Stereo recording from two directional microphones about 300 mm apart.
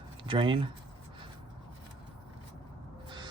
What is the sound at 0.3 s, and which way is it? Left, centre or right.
Speech, centre.